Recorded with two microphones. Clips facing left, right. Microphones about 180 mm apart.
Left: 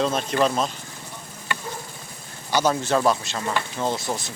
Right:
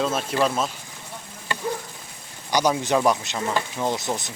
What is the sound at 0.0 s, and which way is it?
Speech, 5° right (ahead or behind).